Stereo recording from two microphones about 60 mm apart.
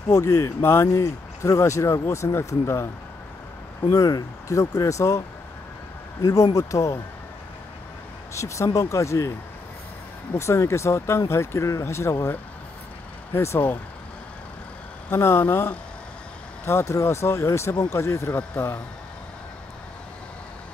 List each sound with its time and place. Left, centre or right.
0.1 s speech: left
0.9 s speech: left
3.9 s speech: left
6.2 s speech: left
8.4 s speech: left
10.3 s speech: left
13.3 s speech: left
15.0 s speech: left
18.3 s speech: left